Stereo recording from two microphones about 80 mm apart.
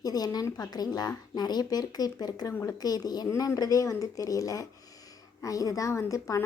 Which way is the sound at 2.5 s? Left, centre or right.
Left.